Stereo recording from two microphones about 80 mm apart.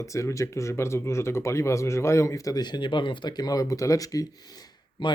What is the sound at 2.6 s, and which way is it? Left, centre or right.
Speech, left.